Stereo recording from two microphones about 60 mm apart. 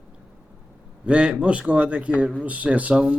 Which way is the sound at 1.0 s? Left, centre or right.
Centre.